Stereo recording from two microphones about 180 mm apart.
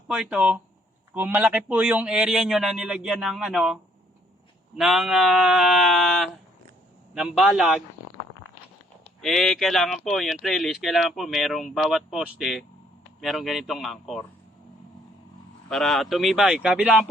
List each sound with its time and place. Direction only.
0.1 s a man's voice: 5° right (ahead or behind)
4.8 s a man's voice: centre (ahead or behind)
9.2 s a man's voice: centre (ahead or behind)
15.7 s a man's voice: centre (ahead or behind)